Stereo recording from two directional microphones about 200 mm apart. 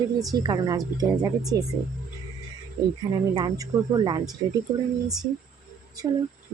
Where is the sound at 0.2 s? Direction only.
20° right (ahead or behind).